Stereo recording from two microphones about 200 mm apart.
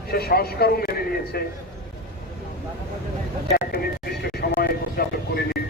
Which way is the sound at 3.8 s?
55° left (ahead or behind).